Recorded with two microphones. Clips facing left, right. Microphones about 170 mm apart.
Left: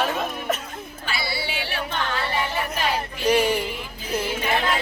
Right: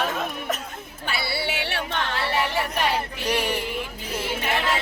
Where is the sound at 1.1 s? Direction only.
60° right (ahead or behind).